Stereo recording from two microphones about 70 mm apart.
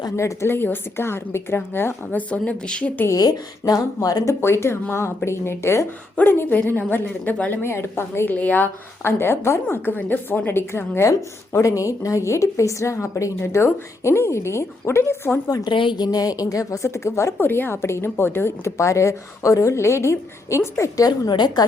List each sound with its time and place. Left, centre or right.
0.2 s speech: left
2.5 s a woman's voice: centre
3.1 s a woman's voice: left
4.4 s speech: left
6.1 s speech: left
7.6 s speech: left
8.3 s speech: left
9.0 s speech: left
11.6 s a woman's voice: left
15.4 s a woman's voice: left
17.3 s speech: left
20.9 s a woman's voice: left